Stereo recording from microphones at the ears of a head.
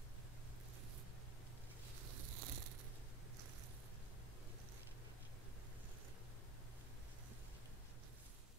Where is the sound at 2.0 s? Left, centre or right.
Right.